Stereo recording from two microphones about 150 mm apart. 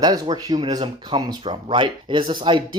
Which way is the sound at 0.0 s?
25° right (ahead or behind).